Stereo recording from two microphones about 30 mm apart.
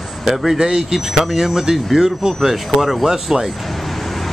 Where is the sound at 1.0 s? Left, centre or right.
Centre.